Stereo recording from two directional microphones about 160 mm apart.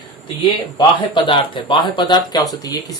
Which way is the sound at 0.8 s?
30° left (ahead or behind).